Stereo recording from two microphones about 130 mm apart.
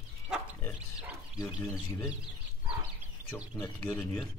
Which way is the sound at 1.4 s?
25° left (ahead or behind).